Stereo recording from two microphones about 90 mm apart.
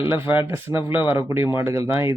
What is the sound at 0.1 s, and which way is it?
Speech, 25° right (ahead or behind).